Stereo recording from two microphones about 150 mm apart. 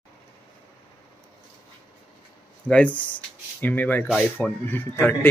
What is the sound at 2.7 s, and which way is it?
A man's voice, 10° left (ahead or behind).